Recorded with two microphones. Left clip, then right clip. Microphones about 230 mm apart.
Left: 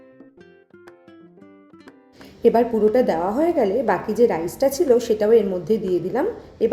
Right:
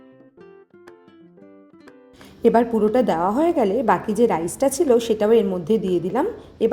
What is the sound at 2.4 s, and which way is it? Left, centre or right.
A woman's voice, centre.